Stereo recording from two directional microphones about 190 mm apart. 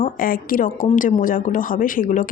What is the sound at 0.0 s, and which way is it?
A woman's voice, 45° left (ahead or behind).